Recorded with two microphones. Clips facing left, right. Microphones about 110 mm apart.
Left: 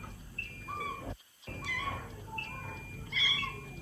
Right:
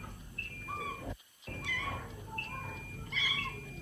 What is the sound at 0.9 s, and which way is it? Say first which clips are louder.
Cat: left 1 dB; 25° left (ahead or behind).